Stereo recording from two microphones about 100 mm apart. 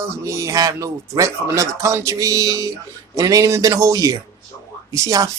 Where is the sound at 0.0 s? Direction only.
30° right (ahead or behind).